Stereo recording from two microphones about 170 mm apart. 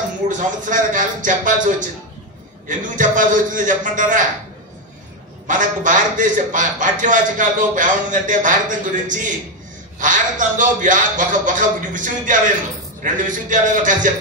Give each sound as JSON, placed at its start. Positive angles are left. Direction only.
{"t": 0.3, "sound": "a man's voice", "side_deg": -50}
{"t": 3.0, "sound": "a man's voice", "side_deg": -50}
{"t": 5.5, "sound": "a man's voice", "side_deg": -50}